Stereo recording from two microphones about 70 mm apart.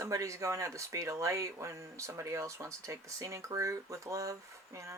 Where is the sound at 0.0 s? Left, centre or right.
Right.